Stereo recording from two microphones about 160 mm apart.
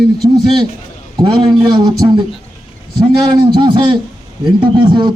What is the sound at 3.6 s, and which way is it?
Speech, 30° right (ahead or behind).